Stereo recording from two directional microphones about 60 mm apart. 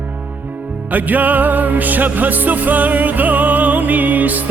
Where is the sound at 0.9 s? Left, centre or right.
Right.